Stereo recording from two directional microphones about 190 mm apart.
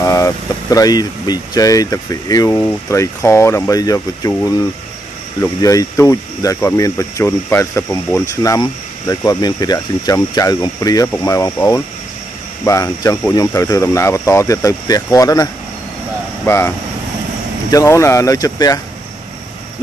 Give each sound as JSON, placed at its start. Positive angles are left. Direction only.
{"t": 0.0, "sound": "speech", "side_deg": 15}